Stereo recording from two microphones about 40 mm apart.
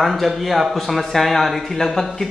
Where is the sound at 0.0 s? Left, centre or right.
Centre.